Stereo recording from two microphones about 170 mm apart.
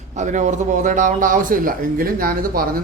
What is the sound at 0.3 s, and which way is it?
A man's voice, 45° right (ahead or behind).